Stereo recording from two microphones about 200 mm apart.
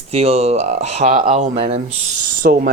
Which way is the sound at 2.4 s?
55° right (ahead or behind).